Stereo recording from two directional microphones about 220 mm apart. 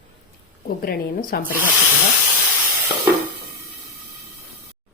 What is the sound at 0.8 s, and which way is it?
Speech, 40° left (ahead or behind).